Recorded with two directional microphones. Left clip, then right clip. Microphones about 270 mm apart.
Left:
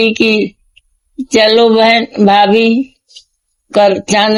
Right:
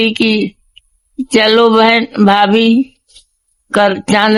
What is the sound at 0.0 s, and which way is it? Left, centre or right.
A man's voice, centre.